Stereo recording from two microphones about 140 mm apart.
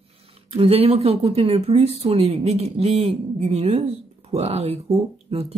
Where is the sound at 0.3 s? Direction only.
45° right (ahead or behind).